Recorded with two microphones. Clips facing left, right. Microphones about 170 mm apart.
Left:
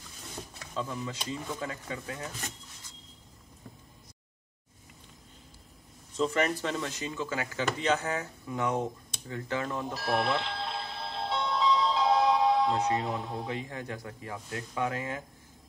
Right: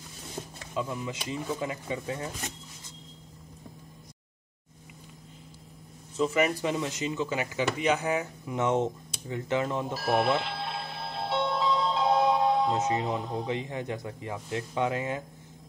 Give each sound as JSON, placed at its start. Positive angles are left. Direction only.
{"t": 0.7, "sound": "speech", "side_deg": -10}
{"t": 6.1, "sound": "speech", "side_deg": -5}
{"t": 9.9, "sound": "music", "side_deg": 0}
{"t": 12.7, "sound": "speech", "side_deg": -20}